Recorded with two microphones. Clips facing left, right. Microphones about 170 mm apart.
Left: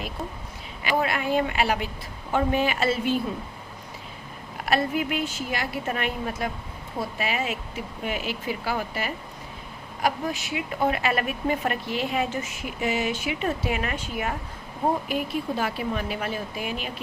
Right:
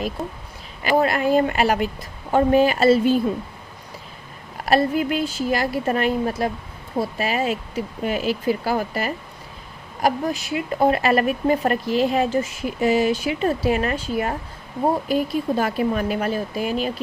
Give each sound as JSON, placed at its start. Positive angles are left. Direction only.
{"t": 0.9, "sound": "speech", "side_deg": -40}
{"t": 4.6, "sound": "speech", "side_deg": -35}